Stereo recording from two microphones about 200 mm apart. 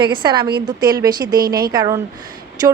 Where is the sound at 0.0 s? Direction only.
25° right (ahead or behind).